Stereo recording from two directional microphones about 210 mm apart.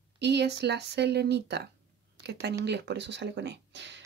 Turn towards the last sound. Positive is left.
turn(degrees=-55)  # may be behind; listen again after turning